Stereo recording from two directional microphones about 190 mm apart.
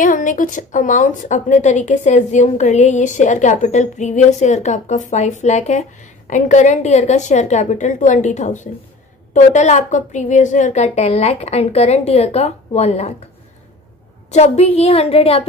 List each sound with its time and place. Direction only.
0.0 s a woman's voice: 45° left (ahead or behind)
14.3 s a woman's voice: 35° left (ahead or behind)